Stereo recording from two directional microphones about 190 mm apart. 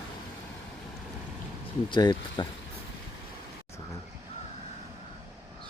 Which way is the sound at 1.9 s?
25° left (ahead or behind).